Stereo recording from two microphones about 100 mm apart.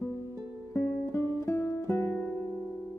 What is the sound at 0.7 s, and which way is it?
Music, 25° left (ahead or behind).